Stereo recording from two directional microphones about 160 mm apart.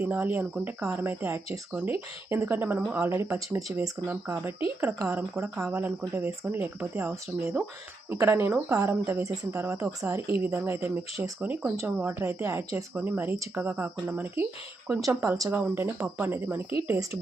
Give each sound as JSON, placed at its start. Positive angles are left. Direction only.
{"t": 0.0, "sound": "speech", "side_deg": -10}